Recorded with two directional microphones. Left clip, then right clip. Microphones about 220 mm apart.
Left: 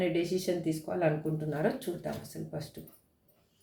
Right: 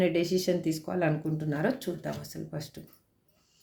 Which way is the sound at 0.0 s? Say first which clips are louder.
Right 4 dB; 50° right (ahead or behind).